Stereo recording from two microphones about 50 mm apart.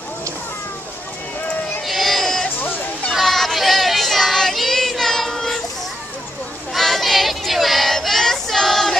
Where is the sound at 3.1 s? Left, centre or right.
Centre.